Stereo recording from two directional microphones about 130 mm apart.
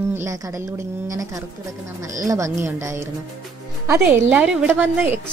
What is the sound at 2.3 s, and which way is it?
A woman's voice, 25° right (ahead or behind).